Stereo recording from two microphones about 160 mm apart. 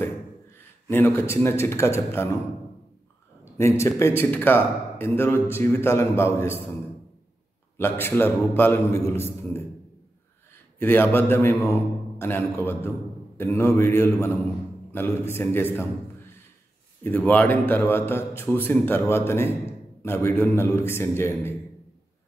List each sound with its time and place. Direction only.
0.8 s a man's voice: 15° left (ahead or behind)
3.5 s a man's voice: 15° left (ahead or behind)
7.7 s a man's voice: 15° left (ahead or behind)
10.8 s a man's voice: 15° left (ahead or behind)
17.0 s a man's voice: 10° left (ahead or behind)